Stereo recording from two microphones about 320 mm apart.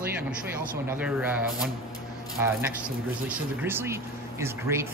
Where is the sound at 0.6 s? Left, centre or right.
Centre.